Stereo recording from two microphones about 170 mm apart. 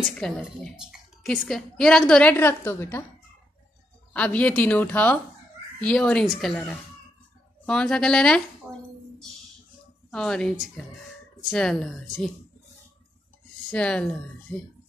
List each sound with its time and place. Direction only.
0.2 s a woman's voice: 5° left (ahead or behind)
4.1 s a woman's voice: 10° left (ahead or behind)
7.6 s a woman's voice: 5° left (ahead or behind)
8.6 s a sound: 10° right (ahead or behind)
10.1 s a woman's voice: 5° left (ahead or behind)
13.7 s a woman's voice: 5° left (ahead or behind)